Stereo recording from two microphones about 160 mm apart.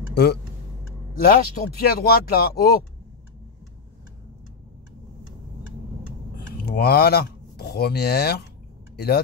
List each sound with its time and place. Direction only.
0.1 s speech: 80° left
6.6 s speech: 85° left